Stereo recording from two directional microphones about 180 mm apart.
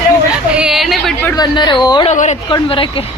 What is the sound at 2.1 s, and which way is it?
Speech, 40° left (ahead or behind).